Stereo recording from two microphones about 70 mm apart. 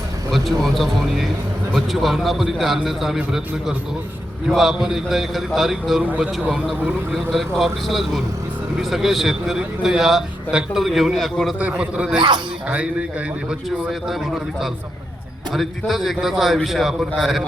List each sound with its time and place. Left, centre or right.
0.3 s a man's voice: centre
3.2 s a man's voice: centre
6.0 s speech: centre
7.1 s a man's voice: centre
11.8 s a man's voice: centre
13.5 s a man's voice: centre